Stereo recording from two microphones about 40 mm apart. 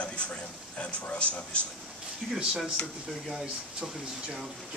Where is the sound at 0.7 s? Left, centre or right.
Left.